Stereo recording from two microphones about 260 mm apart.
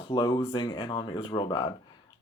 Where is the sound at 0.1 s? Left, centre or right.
Centre.